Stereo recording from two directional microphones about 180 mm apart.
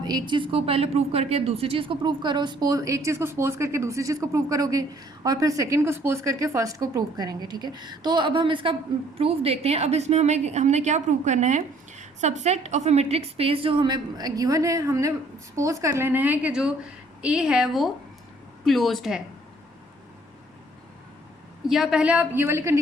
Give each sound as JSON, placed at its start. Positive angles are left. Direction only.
{"t": 0.0, "sound": "a woman's voice", "side_deg": -25}
{"t": 21.7, "sound": "a woman's voice", "side_deg": 0}